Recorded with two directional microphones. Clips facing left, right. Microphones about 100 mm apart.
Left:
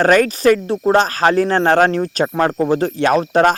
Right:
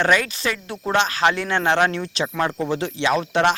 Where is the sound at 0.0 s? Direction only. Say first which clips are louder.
Left 8 dB; 45° left (ahead or behind).